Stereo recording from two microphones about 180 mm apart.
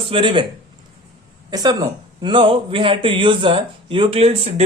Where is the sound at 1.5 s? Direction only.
20° right (ahead or behind).